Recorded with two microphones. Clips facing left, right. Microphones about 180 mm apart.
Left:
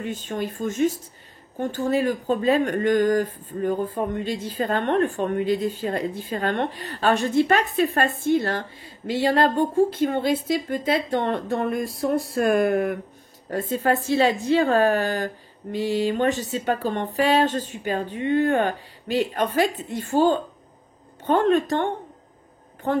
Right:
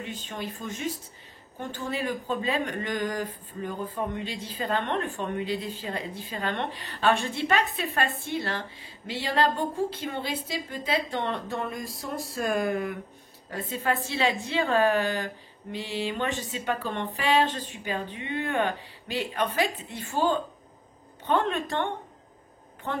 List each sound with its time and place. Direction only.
0.0 s speech: 50° left (ahead or behind)
13.5 s a woman's voice: 45° left (ahead or behind)